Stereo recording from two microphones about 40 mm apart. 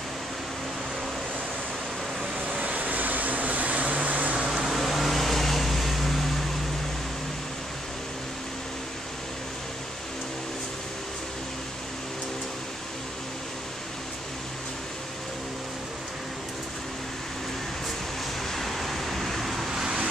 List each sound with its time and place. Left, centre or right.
2.3 s vehicle: right
4.5 s vehicle: centre
18.5 s vehicle: centre
19.7 s vehicle: centre